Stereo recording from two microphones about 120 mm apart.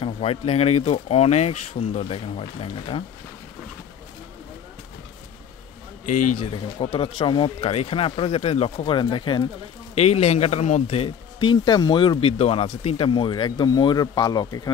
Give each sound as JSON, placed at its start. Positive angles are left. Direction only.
{"t": 0.0, "sound": "speech", "side_deg": 55}
{"t": 6.3, "sound": "speech", "side_deg": 55}
{"t": 9.9, "sound": "speech", "side_deg": 60}